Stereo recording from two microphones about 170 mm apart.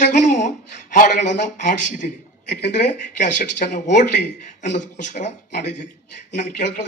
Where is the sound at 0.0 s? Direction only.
45° left (ahead or behind).